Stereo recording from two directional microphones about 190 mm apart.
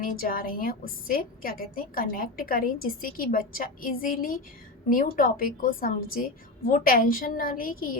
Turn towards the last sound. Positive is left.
turn(degrees=50)  # may be behind; listen again after turning